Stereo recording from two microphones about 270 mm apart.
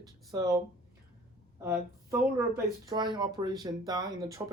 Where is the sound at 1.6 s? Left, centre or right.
Centre.